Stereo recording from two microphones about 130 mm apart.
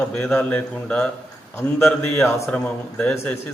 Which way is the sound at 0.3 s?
10° left (ahead or behind).